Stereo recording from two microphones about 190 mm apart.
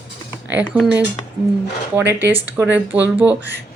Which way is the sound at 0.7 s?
5° right (ahead or behind).